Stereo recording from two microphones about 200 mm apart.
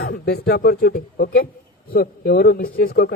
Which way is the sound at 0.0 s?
50° left (ahead or behind).